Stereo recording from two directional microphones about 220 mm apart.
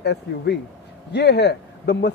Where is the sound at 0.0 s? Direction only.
50° left (ahead or behind).